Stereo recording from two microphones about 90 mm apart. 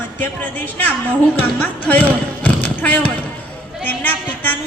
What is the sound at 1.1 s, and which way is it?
A woman's voice, 20° left (ahead or behind).